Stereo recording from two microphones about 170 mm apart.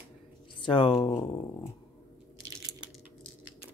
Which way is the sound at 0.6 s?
30° left (ahead or behind).